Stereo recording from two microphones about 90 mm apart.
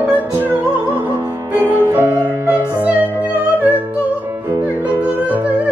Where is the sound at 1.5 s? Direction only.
25° left (ahead or behind).